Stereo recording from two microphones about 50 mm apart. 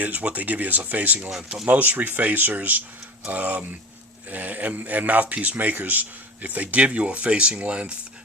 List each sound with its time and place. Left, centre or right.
0.0 s speech: right